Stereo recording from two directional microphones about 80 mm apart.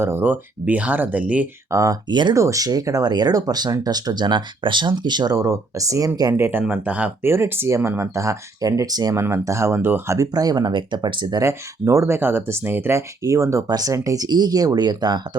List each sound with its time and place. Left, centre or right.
0.0 s speech: right
1.7 s speech: right
2.0 s speech: right
2.3 s speech: right
5.4 s speech: right
6.3 s speech: right
7.2 s speech: right
9.1 s speech: right
10.2 s speech: right
11.3 s speech: right
14.3 s speech: right